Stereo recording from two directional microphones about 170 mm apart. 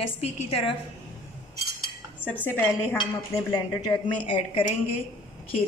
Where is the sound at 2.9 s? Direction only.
25° left (ahead or behind).